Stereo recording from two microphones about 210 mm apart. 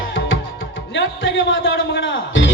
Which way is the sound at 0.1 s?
65° left (ahead or behind).